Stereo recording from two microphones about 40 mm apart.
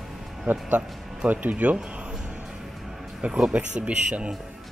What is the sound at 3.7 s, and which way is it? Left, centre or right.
Speech, right.